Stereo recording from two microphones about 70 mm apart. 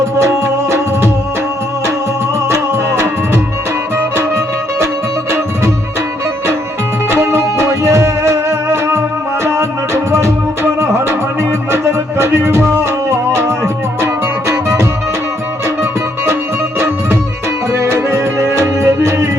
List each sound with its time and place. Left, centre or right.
0.2 s music: right
2.5 s music: right
7.1 s music: right